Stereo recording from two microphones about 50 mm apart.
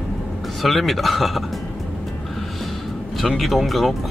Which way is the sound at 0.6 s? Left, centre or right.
Centre.